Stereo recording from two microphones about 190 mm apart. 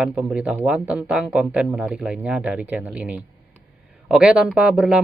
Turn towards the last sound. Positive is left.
turn(degrees=-5)  # may be behind; listen again after turning